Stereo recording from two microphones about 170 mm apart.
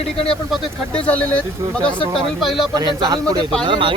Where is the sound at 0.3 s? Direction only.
5° left (ahead or behind).